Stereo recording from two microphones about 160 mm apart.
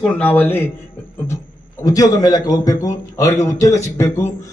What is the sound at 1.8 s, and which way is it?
A man's voice, 20° left (ahead or behind).